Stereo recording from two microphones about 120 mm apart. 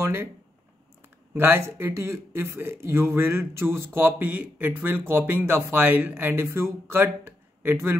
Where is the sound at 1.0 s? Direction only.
20° right (ahead or behind).